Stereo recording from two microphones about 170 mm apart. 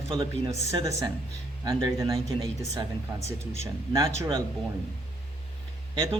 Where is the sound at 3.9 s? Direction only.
20° right (ahead or behind).